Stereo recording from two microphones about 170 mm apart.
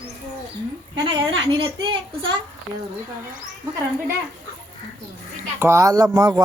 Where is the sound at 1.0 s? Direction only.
25° right (ahead or behind).